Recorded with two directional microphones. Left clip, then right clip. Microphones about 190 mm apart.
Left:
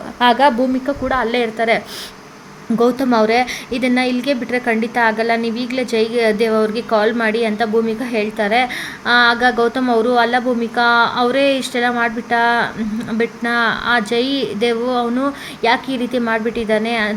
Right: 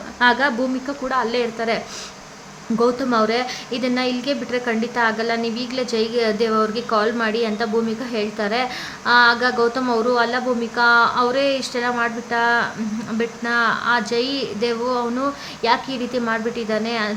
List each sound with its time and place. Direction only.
0.2 s a woman's voice: 20° left (ahead or behind)